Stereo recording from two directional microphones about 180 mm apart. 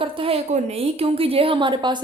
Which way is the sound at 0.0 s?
30° right (ahead or behind).